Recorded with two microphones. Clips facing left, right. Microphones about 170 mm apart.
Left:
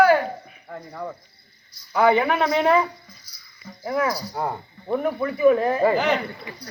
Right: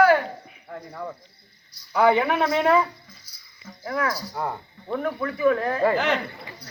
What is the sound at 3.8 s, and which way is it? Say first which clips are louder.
Speech: left 3 dB; 20° left (ahead or behind).